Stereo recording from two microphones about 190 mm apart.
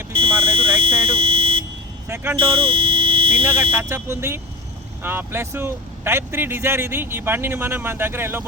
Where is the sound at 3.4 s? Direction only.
10° right (ahead or behind).